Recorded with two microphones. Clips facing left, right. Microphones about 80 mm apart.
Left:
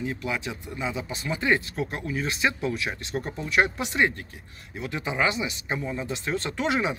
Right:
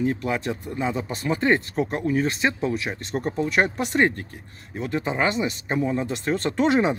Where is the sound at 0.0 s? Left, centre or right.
Right.